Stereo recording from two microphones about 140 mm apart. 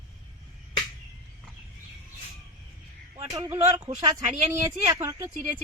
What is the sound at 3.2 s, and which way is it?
Speech, 25° right (ahead or behind).